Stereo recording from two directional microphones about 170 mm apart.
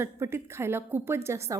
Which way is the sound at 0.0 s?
15° right (ahead or behind).